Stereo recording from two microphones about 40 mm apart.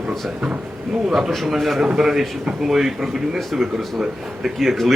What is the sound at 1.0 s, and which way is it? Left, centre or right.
Speech, centre.